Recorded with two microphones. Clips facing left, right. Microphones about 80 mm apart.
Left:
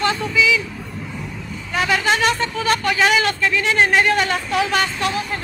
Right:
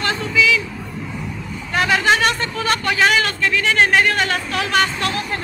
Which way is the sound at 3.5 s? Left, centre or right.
Centre.